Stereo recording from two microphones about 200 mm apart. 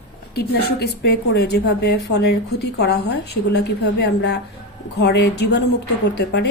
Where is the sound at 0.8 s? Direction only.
55° left (ahead or behind).